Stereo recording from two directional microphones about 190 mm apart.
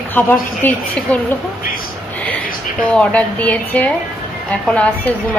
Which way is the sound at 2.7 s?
5° left (ahead or behind).